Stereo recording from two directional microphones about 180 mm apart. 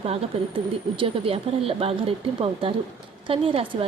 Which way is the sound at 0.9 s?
30° right (ahead or behind).